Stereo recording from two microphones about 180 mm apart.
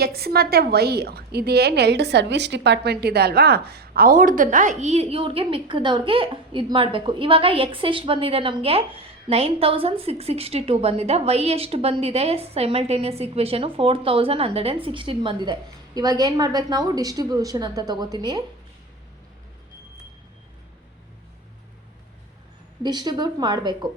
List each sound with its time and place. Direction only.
0.0 s a woman's voice: 60° right (ahead or behind); by 18.4 s 25° right (ahead or behind)
22.8 s a woman's voice: 25° right (ahead or behind)